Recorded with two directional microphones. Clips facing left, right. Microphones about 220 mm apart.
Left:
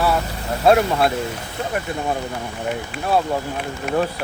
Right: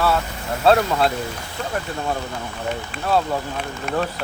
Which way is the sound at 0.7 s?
15° left (ahead or behind).